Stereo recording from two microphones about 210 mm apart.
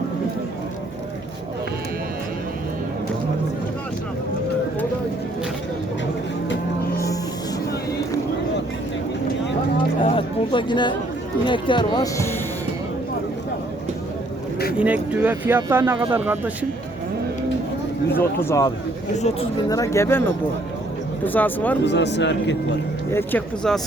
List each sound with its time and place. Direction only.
10.0 s music: 25° left (ahead or behind)
11.4 s speech: 25° left (ahead or behind)
14.8 s speech: 5° right (ahead or behind)
18.2 s speech: 10° left (ahead or behind)
19.1 s speech: 30° left (ahead or behind)
19.6 s speech: 15° left (ahead or behind)
21.3 s speech: 10° left (ahead or behind)
21.8 s speech: 55° left (ahead or behind)
23.1 s speech: 5° left (ahead or behind)